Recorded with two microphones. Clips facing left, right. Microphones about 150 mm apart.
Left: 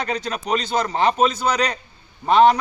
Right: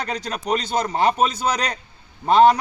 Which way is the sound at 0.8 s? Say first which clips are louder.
Even; 35° right (ahead or behind).